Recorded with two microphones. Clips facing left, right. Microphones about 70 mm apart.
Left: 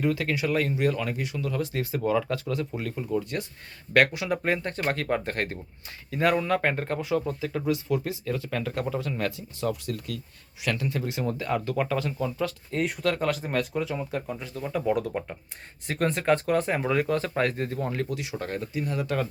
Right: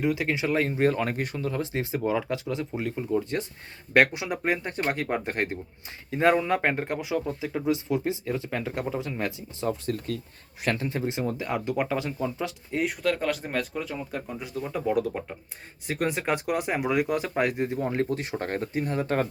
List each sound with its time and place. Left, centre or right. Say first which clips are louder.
0.0 s speech: even; centre
12.7 s speech: right 2 dB; centre
18.1 s speech: right 2 dB; right